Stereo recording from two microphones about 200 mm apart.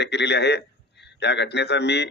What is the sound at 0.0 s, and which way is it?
A man's voice, 55° left (ahead or behind).